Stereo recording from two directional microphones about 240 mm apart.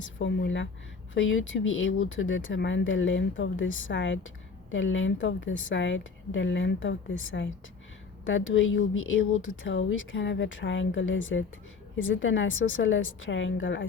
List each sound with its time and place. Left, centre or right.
0.2 s speech: left